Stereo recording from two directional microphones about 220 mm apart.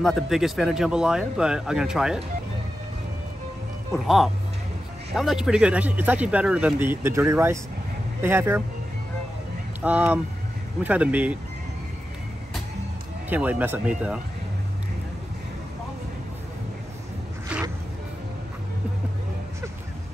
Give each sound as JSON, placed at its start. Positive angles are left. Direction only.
{"t": 0.0, "sound": "speech", "side_deg": 0}
{"t": 3.9, "sound": "speech", "side_deg": 0}
{"t": 9.8, "sound": "speech", "side_deg": -5}
{"t": 13.3, "sound": "speech", "side_deg": -10}
{"t": 17.5, "sound": "music", "side_deg": -5}